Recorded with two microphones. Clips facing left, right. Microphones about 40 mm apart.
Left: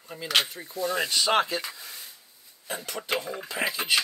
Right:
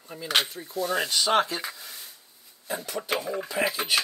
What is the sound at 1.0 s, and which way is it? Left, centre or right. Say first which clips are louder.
Speech: even; left.